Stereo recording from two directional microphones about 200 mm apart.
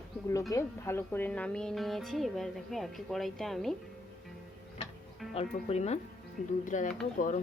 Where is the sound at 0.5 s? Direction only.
10° left (ahead or behind).